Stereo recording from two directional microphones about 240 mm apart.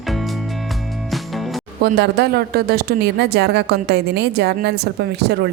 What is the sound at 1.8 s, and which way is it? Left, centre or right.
A woman's voice, right.